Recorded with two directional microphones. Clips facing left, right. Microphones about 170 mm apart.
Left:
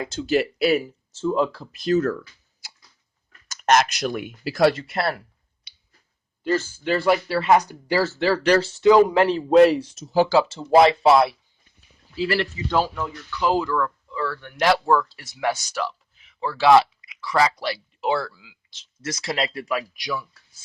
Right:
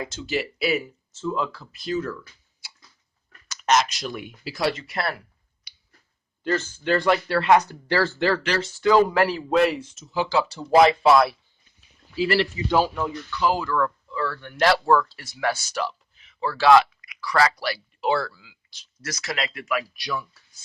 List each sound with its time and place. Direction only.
0.1 s speech: 40° left (ahead or behind)
1.2 s speech: 30° left (ahead or behind)
3.5 s speech: 50° left (ahead or behind)
4.9 s speech: 25° left (ahead or behind)
6.5 s speech: 5° left (ahead or behind)
8.4 s speech: 40° left (ahead or behind)
8.9 s speech: 15° left (ahead or behind)
12.7 s speech: 10° right (ahead or behind)
13.3 s speech: 20° left (ahead or behind)
15.7 s a sound: centre (ahead or behind)
16.2 s speech: 20° left (ahead or behind)
20.0 s speech: 10° left (ahead or behind)